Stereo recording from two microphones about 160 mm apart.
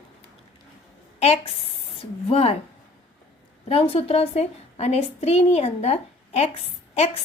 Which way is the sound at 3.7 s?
35° left (ahead or behind).